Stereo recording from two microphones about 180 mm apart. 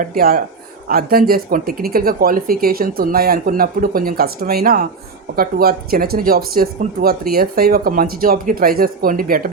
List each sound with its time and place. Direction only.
0.0 s a man's voice: 50° right (ahead or behind)